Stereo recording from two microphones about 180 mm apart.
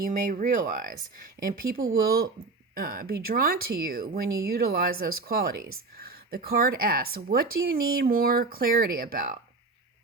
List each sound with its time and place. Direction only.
0.0 s speech: 45° right (ahead or behind)